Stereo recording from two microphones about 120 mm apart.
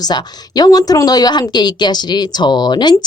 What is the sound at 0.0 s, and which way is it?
A woman's voice, 35° left (ahead or behind).